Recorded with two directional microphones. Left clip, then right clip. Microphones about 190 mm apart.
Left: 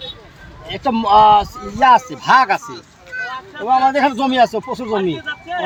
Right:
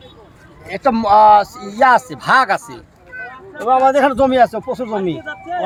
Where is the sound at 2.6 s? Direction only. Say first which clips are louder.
Left 3 dB; 30° right (ahead or behind).